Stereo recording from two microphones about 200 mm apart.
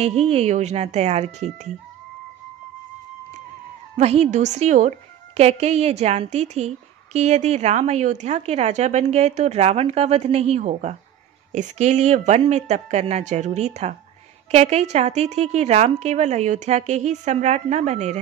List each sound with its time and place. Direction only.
0.0 s a woman's voice: 30° right (ahead or behind)
3.9 s a woman's voice: 35° right (ahead or behind)